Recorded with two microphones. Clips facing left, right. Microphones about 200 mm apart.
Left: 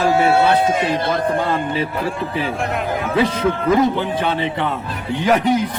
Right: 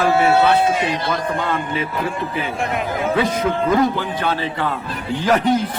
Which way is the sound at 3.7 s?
20° left (ahead or behind).